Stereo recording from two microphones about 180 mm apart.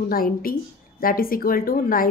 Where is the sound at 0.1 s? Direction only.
55° left (ahead or behind).